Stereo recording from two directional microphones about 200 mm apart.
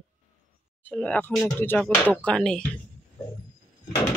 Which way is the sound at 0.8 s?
5° left (ahead or behind).